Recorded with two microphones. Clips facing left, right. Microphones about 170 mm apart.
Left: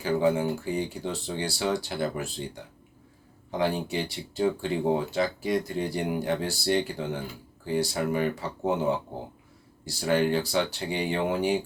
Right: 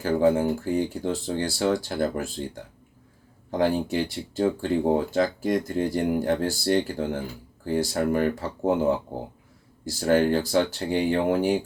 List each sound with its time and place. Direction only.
0.0 s speech: 45° right (ahead or behind)
3.5 s speech: 45° right (ahead or behind)